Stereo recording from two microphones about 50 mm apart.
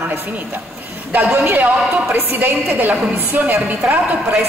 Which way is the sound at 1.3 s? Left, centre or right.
Right.